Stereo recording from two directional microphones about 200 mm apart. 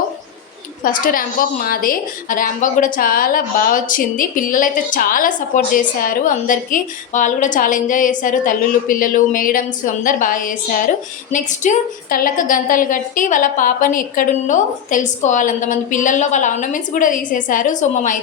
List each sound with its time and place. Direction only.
0.9 s a woman's voice: 45° left (ahead or behind)